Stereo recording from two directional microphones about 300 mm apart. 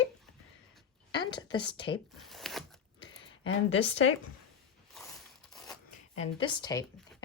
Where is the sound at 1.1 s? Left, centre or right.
Centre.